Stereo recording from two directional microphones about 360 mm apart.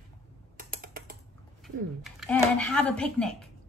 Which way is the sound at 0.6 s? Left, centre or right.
Right.